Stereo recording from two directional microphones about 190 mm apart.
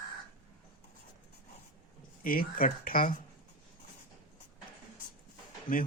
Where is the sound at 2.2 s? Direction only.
50° left (ahead or behind).